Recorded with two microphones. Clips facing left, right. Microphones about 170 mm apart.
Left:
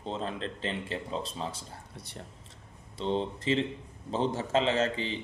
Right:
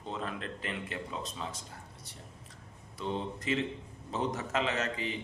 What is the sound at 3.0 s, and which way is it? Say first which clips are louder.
A man's voice: left 5 dB; 30° left (ahead or behind).